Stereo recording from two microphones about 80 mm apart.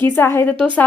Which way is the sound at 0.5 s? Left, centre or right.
Centre.